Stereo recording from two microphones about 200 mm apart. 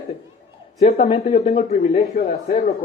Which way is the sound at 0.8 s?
30° left (ahead or behind).